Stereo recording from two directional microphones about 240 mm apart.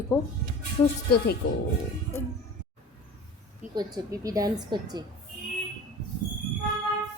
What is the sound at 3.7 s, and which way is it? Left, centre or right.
A woman's voice, centre.